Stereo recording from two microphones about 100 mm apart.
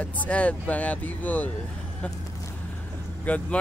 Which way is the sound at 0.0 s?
15° left (ahead or behind).